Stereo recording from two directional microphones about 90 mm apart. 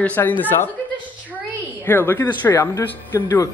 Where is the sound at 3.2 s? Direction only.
40° left (ahead or behind).